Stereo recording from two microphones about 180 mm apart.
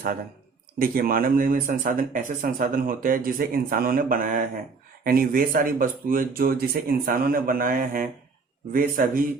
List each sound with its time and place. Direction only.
0.8 s speech: 55° right (ahead or behind)